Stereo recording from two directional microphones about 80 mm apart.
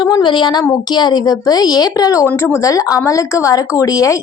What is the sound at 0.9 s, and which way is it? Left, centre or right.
A woman's voice, left.